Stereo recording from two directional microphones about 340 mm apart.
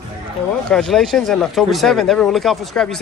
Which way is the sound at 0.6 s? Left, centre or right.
Centre.